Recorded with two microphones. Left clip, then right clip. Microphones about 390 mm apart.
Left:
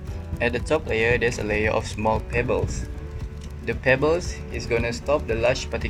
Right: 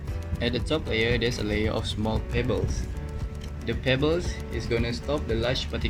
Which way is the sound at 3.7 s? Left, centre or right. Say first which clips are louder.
Left 5 dB; left.